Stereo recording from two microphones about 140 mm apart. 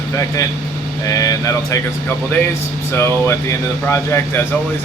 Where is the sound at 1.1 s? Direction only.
25° left (ahead or behind).